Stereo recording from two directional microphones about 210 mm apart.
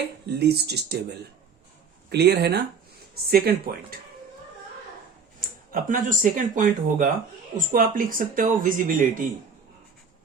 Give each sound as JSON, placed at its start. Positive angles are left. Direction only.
{"t": 0.3, "sound": "speech", "side_deg": -50}
{"t": 2.0, "sound": "speech", "side_deg": -50}
{"t": 5.4, "sound": "speech", "side_deg": -40}